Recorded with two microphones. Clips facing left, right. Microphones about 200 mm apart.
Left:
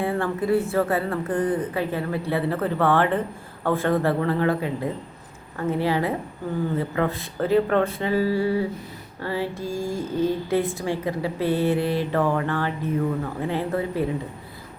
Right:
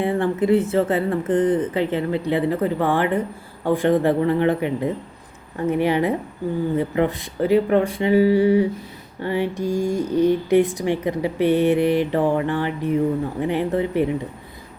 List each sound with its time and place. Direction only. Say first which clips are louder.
0.0 s a woman's voice: right 4 dB; 20° right (ahead or behind)